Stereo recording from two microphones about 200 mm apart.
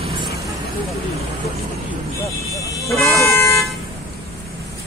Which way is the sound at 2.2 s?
15° left (ahead or behind).